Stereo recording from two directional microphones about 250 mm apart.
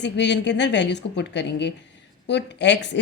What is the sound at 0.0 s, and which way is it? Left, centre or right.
A woman's voice, left.